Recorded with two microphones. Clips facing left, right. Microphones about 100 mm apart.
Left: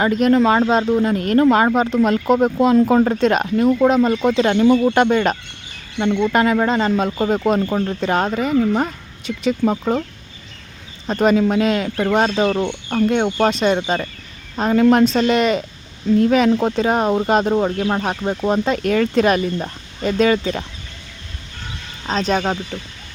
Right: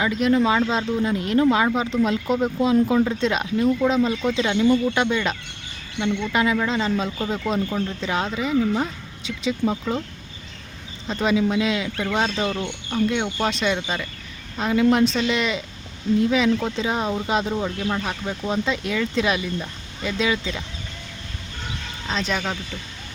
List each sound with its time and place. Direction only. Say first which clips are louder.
0.0 s speech: left 5 dB; 50° left (ahead or behind)
11.1 s speech: left 5 dB; 50° left (ahead or behind)
22.0 s speech: left 7 dB; 40° left (ahead or behind)